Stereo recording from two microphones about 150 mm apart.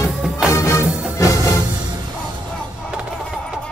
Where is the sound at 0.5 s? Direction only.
20° left (ahead or behind).